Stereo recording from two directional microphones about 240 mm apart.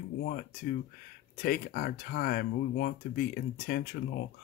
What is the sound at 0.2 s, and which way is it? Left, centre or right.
Speech, left.